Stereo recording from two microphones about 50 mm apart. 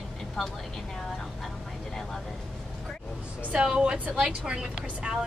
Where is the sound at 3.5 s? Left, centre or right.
Centre.